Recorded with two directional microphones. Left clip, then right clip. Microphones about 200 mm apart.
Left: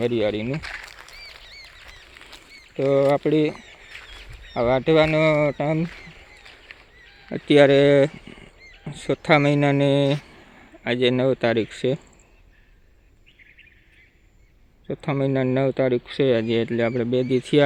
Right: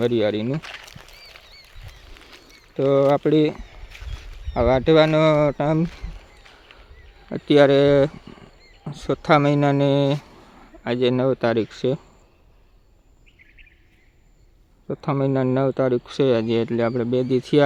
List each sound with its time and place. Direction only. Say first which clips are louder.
0.0 s speech: right 2 dB; 15° right (ahead or behind)
0.5 s a sound: even; 10° left (ahead or behind)
2.7 s speech: right 1 dB; 15° right (ahead or behind)
4.5 s speech: right 2 dB; 20° right (ahead or behind)
7.3 s speech: even; centre (ahead or behind)
14.8 s speech: right 1 dB; 5° right (ahead or behind)